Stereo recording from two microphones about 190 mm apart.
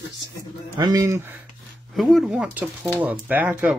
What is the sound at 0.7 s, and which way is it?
Speech, 20° right (ahead or behind).